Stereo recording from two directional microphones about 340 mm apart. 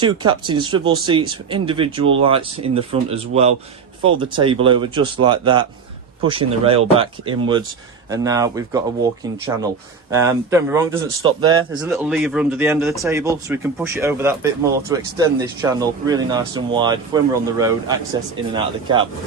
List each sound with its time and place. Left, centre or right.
0.0 s speech: centre
10.1 s speech: centre